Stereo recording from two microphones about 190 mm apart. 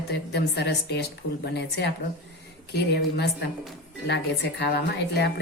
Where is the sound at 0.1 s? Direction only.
60° left (ahead or behind).